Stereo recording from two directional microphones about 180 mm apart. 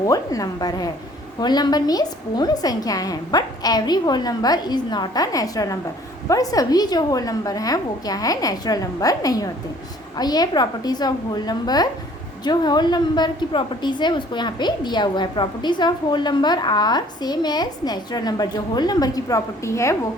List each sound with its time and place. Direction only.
0.0 s a woman's voice: 20° left (ahead or behind)